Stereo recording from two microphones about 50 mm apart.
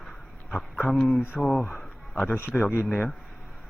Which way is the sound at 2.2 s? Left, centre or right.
Left.